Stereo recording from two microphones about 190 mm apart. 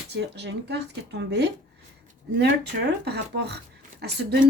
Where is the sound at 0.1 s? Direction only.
60° right (ahead or behind).